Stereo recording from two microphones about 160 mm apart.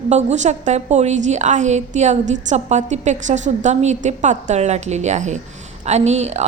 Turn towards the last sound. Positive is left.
turn(degrees=-45)  # may be behind; listen again after turning